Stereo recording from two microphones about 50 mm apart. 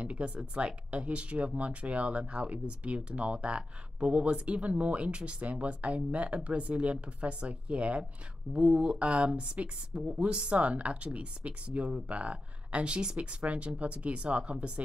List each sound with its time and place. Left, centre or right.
0.0 s speech: right